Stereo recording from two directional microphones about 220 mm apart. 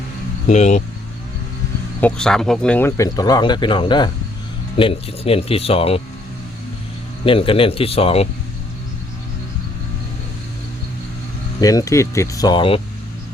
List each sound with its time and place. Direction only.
0.4 s speech: 30° left (ahead or behind)
2.0 s speech: 5° left (ahead or behind); by 6.0 s 25° left (ahead or behind)
7.3 s speech: 25° left (ahead or behind)
11.6 s speech: 15° left (ahead or behind)